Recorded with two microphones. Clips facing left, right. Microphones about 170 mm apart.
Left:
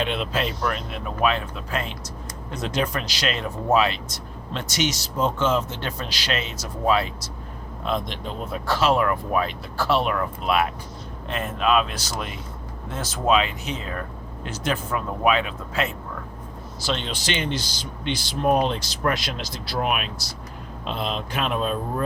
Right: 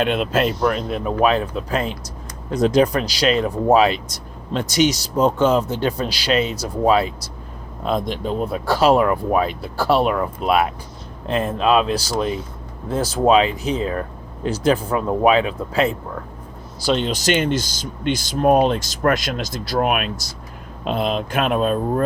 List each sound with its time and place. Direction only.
0.0 s speech: 45° right (ahead or behind)